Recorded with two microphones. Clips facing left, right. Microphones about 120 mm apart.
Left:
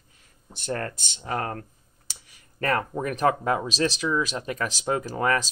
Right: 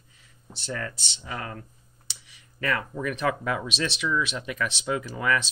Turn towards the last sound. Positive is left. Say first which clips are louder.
# left 2 dB
turn(degrees=40)  # may be behind; listen again after turning